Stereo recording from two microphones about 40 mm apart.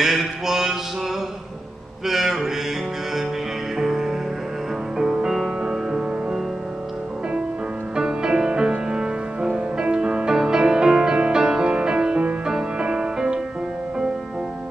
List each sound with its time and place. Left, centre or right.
0.0 s mantra: centre
2.0 s mantra: centre
3.7 s music: centre
7.9 s music: centre